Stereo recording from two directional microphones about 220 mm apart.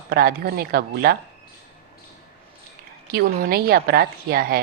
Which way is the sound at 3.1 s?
45° right (ahead or behind).